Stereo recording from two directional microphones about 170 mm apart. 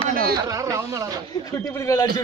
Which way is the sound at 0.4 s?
20° right (ahead or behind).